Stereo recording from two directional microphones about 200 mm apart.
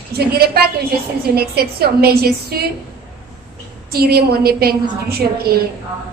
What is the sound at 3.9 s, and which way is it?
A woman's voice, 50° right (ahead or behind).